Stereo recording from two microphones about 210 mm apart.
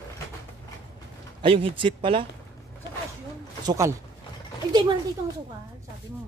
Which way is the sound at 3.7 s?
15° right (ahead or behind).